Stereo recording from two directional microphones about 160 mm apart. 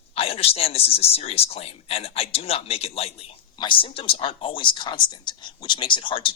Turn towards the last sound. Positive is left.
turn(degrees=30)  # may be behind; listen again after turning